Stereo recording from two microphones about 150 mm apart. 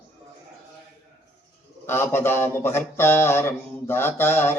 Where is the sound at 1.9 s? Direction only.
15° left (ahead or behind).